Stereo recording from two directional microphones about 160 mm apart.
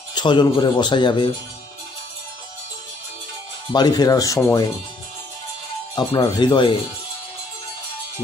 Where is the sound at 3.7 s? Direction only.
25° left (ahead or behind).